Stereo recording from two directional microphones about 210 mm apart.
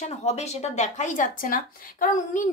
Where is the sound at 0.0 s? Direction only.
30° left (ahead or behind).